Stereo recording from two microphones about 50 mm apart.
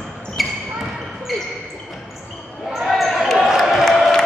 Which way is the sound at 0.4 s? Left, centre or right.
Centre.